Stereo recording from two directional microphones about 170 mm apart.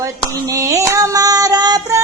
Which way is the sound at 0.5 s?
20° right (ahead or behind).